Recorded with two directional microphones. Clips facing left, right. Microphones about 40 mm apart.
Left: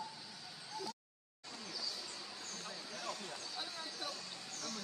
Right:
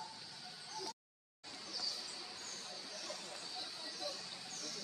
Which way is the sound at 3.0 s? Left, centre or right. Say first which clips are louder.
Left 6 dB; left.